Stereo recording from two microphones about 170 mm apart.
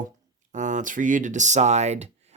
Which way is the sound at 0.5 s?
45° right (ahead or behind).